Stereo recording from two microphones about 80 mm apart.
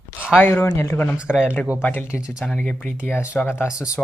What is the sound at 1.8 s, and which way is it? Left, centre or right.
Speech, left.